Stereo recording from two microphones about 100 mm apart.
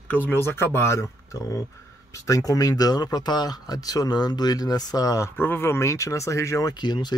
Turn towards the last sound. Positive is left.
turn(degrees=45)  # may be behind; listen again after turning